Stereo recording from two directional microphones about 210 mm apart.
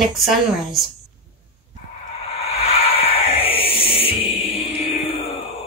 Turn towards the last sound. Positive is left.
turn(degrees=25)  # may be behind; listen again after turning